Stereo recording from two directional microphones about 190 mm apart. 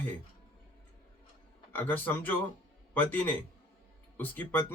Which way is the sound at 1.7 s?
10° left (ahead or behind).